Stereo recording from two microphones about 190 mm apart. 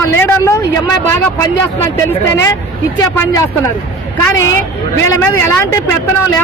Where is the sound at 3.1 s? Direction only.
15° left (ahead or behind).